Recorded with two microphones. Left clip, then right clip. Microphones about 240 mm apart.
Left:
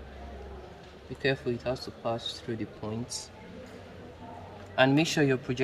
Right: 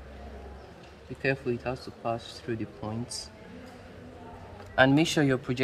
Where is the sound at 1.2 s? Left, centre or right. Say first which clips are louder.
Even; centre.